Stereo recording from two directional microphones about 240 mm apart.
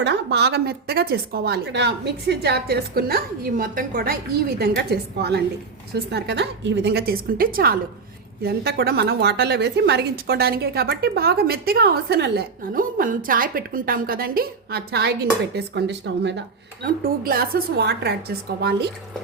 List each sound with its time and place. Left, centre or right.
0.0 s a woman's voice: right